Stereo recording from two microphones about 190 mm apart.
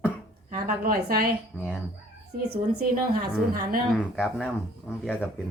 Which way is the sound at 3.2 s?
50° right (ahead or behind).